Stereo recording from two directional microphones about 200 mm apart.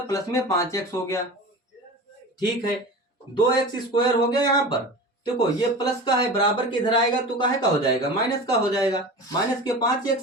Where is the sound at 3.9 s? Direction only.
20° left (ahead or behind).